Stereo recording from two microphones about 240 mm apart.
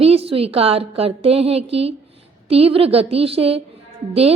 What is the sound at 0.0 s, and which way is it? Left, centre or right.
A woman's voice, right.